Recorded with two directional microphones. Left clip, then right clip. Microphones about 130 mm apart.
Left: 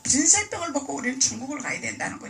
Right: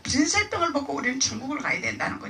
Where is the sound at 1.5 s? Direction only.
25° right (ahead or behind).